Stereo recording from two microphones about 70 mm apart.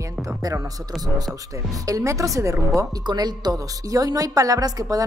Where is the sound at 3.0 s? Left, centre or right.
Right.